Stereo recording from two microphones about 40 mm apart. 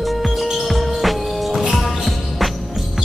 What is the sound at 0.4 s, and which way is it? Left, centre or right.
Music, centre.